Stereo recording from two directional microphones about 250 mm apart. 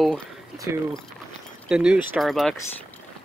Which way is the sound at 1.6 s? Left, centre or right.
Centre.